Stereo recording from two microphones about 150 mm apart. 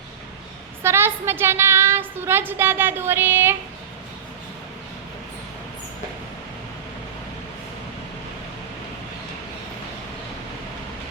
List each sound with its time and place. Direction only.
0.8 s a woman's voice: 15° right (ahead or behind)